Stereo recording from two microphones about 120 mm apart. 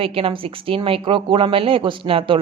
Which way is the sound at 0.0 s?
50° right (ahead or behind).